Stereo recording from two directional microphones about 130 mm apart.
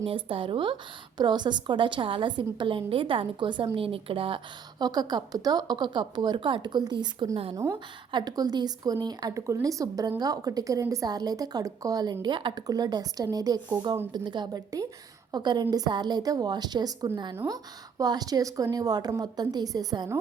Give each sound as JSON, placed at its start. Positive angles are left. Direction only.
{"t": 0.0, "sound": "a woman's voice", "side_deg": -45}
{"t": 4.8, "sound": "a woman's voice", "side_deg": -30}
{"t": 7.5, "sound": "speech", "side_deg": -20}
{"t": 8.1, "sound": "a woman's voice", "side_deg": -30}